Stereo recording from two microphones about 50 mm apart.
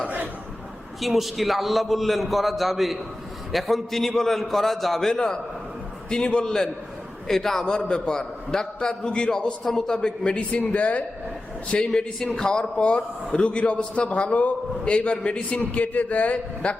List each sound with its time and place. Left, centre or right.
1.0 s a man's voice: centre; by 11.0 s left
11.7 s a man's voice: centre
16.6 s a man's voice: left